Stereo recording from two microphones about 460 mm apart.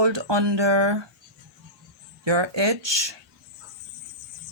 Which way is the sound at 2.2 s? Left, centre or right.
Right.